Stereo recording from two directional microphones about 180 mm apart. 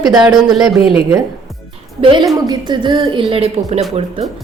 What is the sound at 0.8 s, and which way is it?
Speech, 30° left (ahead or behind).